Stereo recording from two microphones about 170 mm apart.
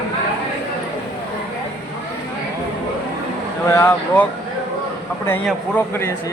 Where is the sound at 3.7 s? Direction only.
15° left (ahead or behind).